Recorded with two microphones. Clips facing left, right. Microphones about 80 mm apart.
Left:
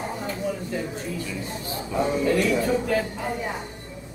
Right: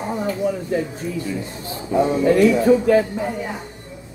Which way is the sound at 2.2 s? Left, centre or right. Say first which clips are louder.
Right 8 dB; right.